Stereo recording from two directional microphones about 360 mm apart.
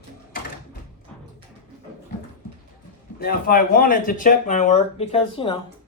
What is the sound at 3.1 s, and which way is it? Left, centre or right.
Speech, left.